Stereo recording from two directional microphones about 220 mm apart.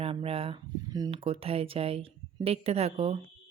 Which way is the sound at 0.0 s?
25° right (ahead or behind).